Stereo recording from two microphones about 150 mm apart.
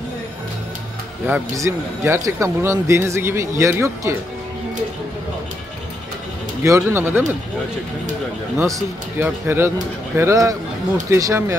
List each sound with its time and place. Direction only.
1.2 s speech: 15° right (ahead or behind)
6.6 s speech: 15° right (ahead or behind)
8.5 s speech: 20° right (ahead or behind)